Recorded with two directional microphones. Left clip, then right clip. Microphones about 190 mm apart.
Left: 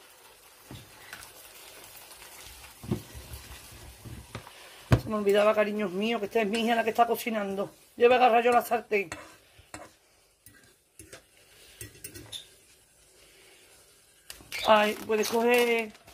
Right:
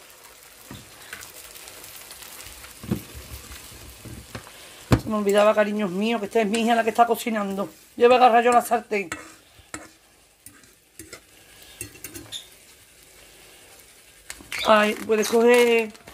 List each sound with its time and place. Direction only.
5.0 s speech: 5° right (ahead or behind)
14.6 s speech: 5° right (ahead or behind)